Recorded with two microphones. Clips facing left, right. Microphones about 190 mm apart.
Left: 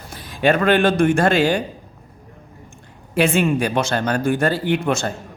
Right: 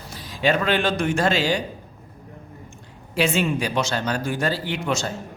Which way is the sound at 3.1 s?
55° left (ahead or behind).